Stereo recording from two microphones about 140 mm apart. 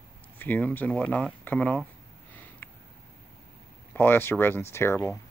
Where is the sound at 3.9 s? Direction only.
15° left (ahead or behind).